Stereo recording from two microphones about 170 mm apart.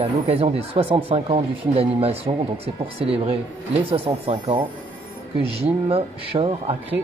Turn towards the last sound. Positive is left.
turn(degrees=-35)  # may be behind; listen again after turning